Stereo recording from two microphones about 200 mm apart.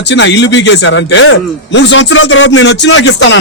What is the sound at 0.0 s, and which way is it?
A man's voice, 60° left (ahead or behind).